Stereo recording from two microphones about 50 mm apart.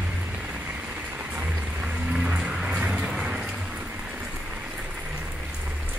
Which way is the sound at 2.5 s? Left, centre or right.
Centre.